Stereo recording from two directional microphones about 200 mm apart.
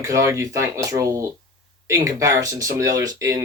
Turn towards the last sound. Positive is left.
turn(degrees=-15)  # may be behind; listen again after turning